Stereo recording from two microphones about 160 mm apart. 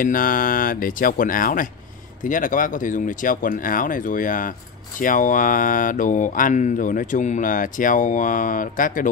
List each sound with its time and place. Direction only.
0.0 s speech: 60° left (ahead or behind)